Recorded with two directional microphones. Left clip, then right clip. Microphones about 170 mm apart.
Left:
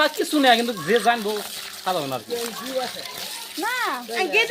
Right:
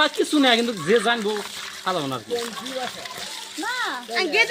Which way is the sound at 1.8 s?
60° right (ahead or behind).